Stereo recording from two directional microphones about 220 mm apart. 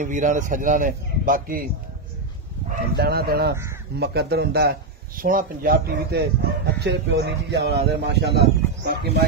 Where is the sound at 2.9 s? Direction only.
45° right (ahead or behind).